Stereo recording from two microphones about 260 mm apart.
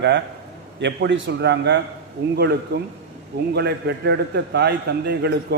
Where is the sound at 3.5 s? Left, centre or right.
Right.